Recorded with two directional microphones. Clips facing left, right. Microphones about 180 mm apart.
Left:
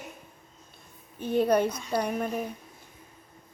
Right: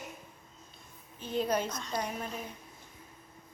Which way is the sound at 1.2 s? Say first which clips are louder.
Left 8 dB; 55° left (ahead or behind).